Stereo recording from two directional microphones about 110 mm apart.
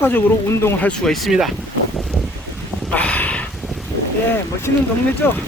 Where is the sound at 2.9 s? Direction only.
15° left (ahead or behind).